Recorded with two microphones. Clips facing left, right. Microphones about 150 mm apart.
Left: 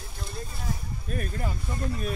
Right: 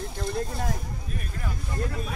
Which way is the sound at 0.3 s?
70° right (ahead or behind).